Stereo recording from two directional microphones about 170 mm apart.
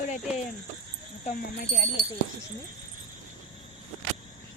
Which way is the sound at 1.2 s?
55° left (ahead or behind).